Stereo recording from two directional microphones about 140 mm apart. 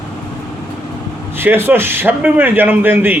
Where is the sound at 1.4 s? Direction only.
15° right (ahead or behind).